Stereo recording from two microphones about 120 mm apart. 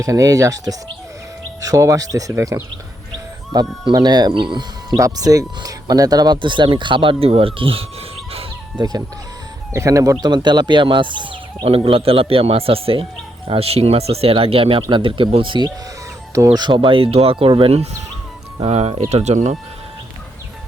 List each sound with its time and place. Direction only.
0.0 s speech: 25° right (ahead or behind)
3.5 s speech: 35° right (ahead or behind)
4.9 s speech: 30° right (ahead or behind); by 7.9 s 50° right (ahead or behind)
8.8 s speech: 35° right (ahead or behind)
16.3 s speech: 30° right (ahead or behind); by 19.5 s 70° right (ahead or behind)